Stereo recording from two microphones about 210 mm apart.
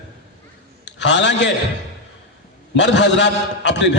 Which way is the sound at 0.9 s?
55° left (ahead or behind).